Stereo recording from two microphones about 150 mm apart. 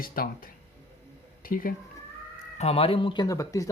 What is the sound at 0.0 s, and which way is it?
Speech, 75° left (ahead or behind).